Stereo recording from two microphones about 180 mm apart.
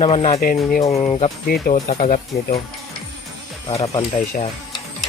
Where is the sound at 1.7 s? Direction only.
45° left (ahead or behind).